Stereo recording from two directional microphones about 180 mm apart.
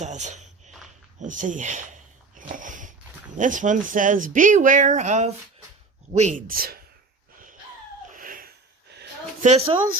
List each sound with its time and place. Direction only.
0.0 s speech: 40° right (ahead or behind)
1.2 s a sound: 45° right (ahead or behind)
2.5 s sniff: 45° right (ahead or behind)
3.3 s speech: 45° right (ahead or behind)
8.1 s a sound: 50° right (ahead or behind)
9.4 s speech: 35° right (ahead or behind)